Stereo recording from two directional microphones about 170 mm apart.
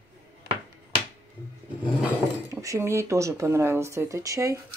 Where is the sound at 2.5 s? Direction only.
20° right (ahead or behind).